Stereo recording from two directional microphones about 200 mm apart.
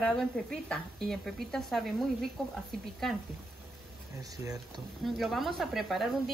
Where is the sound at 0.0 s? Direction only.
5° left (ahead or behind).